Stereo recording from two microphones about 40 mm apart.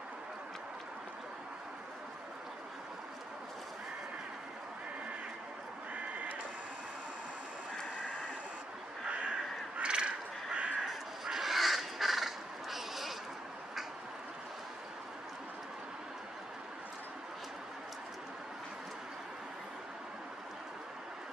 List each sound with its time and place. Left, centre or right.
5.9 s a sound: right
9.8 s crow: right
10.9 s crow: centre